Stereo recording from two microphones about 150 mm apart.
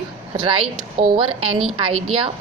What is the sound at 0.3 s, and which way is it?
A woman's voice, 35° right (ahead or behind).